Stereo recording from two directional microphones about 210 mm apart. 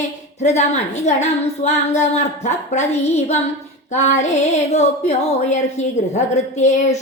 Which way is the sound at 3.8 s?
35° left (ahead or behind).